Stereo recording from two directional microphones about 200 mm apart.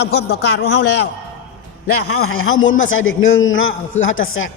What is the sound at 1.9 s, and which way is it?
A man's voice, 90° left.